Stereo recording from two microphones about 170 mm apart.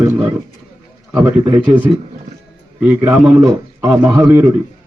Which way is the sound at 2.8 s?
10° right (ahead or behind).